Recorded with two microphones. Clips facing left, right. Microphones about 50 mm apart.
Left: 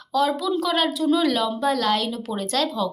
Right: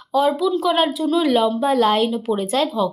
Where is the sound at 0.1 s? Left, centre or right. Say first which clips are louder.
Right 4 dB; centre.